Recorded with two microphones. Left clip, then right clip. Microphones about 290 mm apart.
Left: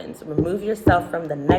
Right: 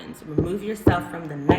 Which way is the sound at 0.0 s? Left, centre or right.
Centre.